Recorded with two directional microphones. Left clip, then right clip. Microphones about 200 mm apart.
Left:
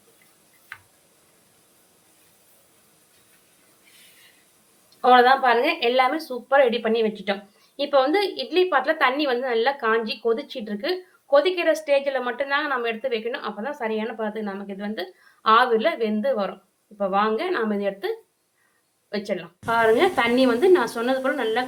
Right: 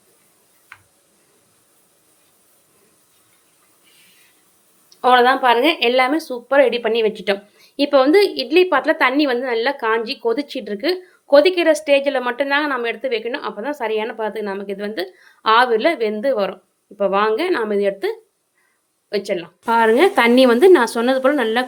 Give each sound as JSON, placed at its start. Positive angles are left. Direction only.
{"t": 4.9, "sound": "a woman's voice", "side_deg": -35}